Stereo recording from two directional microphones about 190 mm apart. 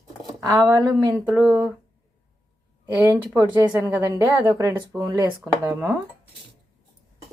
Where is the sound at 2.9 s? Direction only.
15° right (ahead or behind).